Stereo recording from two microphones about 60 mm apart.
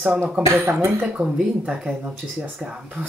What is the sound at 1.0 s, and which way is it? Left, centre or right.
Speech, right.